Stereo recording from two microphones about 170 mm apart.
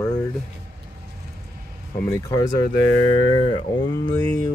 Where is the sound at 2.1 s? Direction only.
20° left (ahead or behind).